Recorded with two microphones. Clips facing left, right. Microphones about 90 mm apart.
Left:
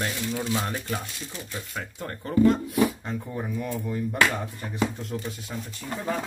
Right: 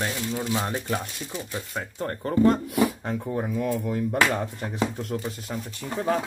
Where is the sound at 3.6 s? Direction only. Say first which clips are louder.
Right 3 dB; 90° right.